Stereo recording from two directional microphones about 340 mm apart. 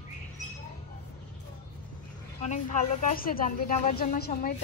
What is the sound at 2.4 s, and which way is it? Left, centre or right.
Speech, left.